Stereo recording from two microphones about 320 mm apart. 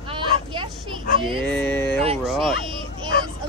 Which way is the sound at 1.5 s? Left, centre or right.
Centre.